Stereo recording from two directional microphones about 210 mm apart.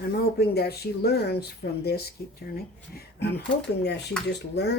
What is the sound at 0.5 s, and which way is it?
Speech, 50° left (ahead or behind).